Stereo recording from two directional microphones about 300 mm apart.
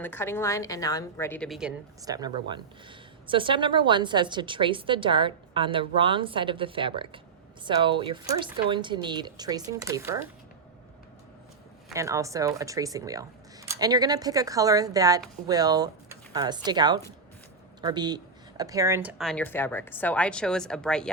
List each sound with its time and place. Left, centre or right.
0.0 s a woman's voice: centre
11.9 s a woman's voice: centre